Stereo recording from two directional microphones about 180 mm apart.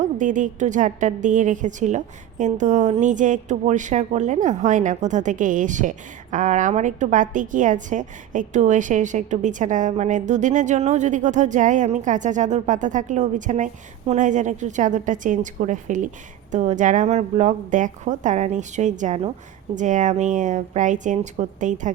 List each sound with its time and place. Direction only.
0.2 s a woman's voice: 45° right (ahead or behind)